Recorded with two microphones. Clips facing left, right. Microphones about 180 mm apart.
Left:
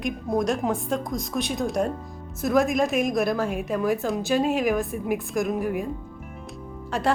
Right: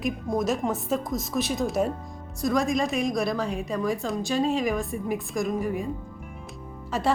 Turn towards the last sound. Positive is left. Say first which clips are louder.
# left 1 dB
turn(degrees=0)  # may be behind; listen again after turning